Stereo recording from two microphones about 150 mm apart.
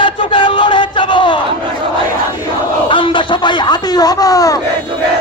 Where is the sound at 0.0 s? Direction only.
35° left (ahead or behind).